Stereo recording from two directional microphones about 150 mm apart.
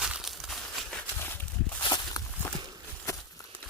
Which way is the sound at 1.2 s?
15° left (ahead or behind).